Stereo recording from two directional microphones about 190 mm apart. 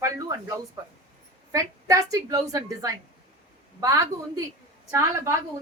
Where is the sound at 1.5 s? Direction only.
15° right (ahead or behind).